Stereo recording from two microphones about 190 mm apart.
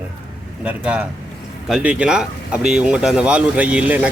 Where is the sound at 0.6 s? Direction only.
5° right (ahead or behind).